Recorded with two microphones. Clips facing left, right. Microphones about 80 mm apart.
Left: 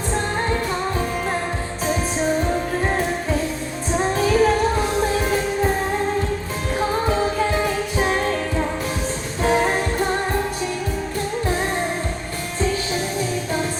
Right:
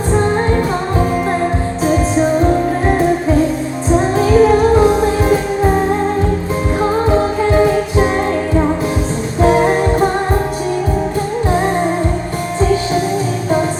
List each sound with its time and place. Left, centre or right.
4.2 s music: centre
7.6 s music: right